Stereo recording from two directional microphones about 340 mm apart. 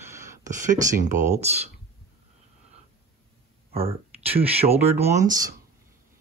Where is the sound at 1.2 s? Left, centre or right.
Centre.